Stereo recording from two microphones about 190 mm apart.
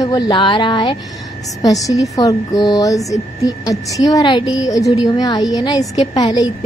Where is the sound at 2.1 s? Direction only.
20° left (ahead or behind).